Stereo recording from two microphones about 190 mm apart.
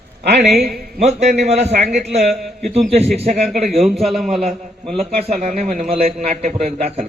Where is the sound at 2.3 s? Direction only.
Centre (ahead or behind).